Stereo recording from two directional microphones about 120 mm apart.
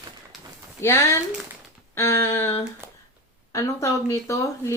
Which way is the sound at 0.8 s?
25° left (ahead or behind).